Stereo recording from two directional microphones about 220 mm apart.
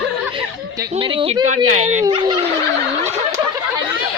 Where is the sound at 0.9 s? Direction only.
25° right (ahead or behind).